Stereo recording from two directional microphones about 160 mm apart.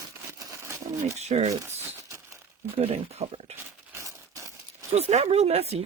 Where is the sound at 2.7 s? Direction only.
40° right (ahead or behind).